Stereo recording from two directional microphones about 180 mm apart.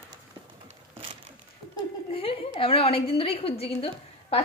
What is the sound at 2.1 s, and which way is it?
A woman's voice, 30° left (ahead or behind).